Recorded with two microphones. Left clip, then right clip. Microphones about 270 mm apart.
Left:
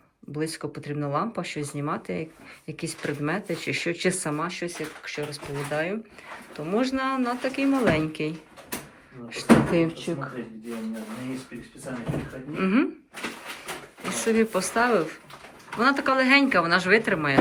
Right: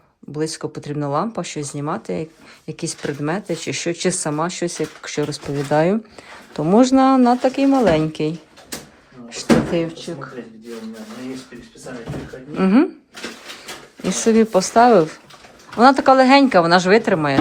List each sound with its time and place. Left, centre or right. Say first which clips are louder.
0.3 s speech: right 6 dB; centre
9.8 s speech: right 1 dB; centre
12.5 s speech: right 8 dB; centre
14.1 s speech: right 8 dB; centre